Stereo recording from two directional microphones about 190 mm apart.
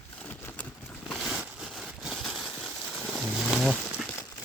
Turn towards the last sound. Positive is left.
turn(degrees=0)  # may be behind; listen again after turning